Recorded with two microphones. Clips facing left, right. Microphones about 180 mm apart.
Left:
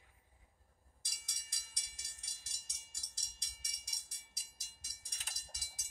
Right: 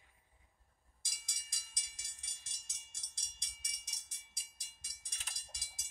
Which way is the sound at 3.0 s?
40° left (ahead or behind).